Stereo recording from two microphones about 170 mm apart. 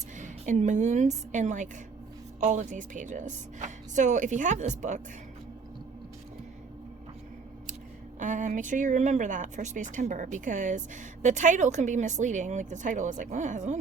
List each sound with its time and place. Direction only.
0.2 s a woman's voice: 45° right (ahead or behind)
8.2 s speech: 50° right (ahead or behind)